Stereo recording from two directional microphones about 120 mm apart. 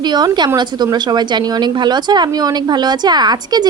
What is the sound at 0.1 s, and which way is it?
Speech, 35° right (ahead or behind).